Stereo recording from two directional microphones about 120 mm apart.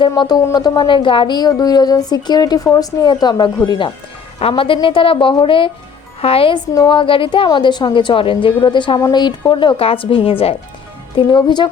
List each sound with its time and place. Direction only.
0.5 s a woman's voice: 35° left (ahead or behind)